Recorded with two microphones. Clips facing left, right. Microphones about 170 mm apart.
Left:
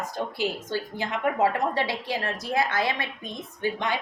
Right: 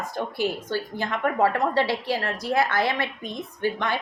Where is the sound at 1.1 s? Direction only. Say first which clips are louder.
Right 1 dB; 15° left (ahead or behind).